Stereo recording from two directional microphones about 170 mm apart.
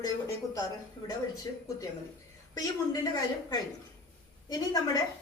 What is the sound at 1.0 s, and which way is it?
Speech, 20° left (ahead or behind).